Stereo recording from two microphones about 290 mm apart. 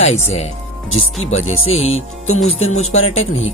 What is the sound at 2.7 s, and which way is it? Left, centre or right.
Speech, left.